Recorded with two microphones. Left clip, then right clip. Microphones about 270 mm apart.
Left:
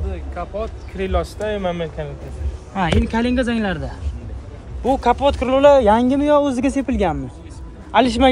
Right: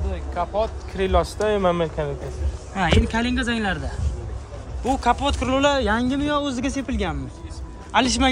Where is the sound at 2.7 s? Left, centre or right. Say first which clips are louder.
Left 1 dB; centre.